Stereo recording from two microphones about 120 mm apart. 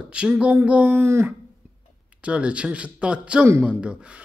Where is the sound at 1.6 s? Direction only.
20° right (ahead or behind).